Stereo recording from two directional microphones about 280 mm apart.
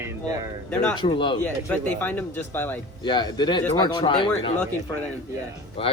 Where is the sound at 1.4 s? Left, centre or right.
Centre.